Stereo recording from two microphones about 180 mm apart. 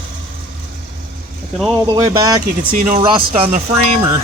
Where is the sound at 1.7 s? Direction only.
20° right (ahead or behind).